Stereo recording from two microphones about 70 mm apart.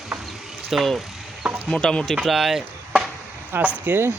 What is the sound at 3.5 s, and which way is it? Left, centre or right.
Speech, right.